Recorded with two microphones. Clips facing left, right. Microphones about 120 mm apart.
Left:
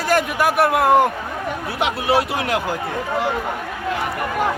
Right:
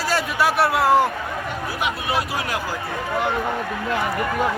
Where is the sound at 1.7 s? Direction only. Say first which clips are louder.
Left 6 dB; 75° left (ahead or behind).